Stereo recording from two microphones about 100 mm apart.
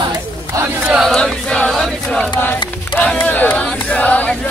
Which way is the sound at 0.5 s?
35° right (ahead or behind).